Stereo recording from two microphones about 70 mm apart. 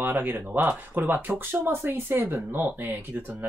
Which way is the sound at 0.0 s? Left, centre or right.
Right.